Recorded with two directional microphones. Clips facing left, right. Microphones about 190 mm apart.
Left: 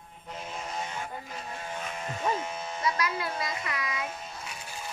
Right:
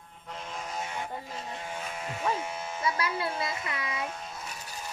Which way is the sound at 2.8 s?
25° right (ahead or behind).